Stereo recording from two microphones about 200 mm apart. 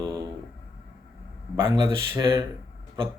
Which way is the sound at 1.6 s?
25° right (ahead or behind).